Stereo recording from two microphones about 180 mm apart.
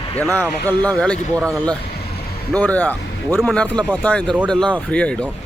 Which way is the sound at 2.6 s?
10° left (ahead or behind).